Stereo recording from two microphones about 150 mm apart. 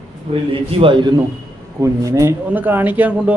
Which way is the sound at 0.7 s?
35° right (ahead or behind).